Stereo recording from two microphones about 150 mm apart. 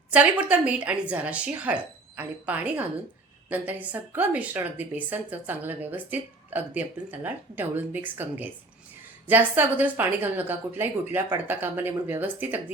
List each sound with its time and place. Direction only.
0.1 s a woman's voice: 10° right (ahead or behind)